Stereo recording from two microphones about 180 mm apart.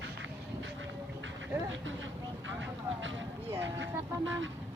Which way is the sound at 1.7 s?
90° right.